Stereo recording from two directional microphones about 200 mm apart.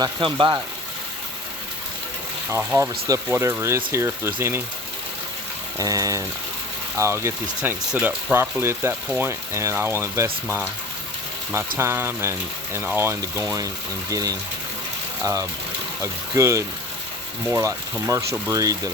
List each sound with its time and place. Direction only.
0.0 s speech: 25° right (ahead or behind)
2.5 s speech: 10° right (ahead or behind)
5.8 s speech: 15° right (ahead or behind)
11.8 s speech: 10° right (ahead or behind)